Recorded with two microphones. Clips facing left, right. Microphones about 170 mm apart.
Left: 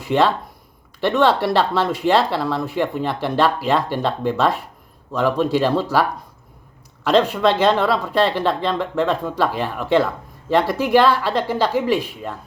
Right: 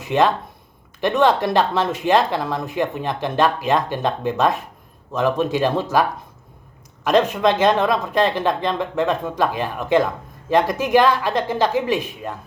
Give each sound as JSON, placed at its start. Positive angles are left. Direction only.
{"t": 0.0, "sound": "speech", "side_deg": -20}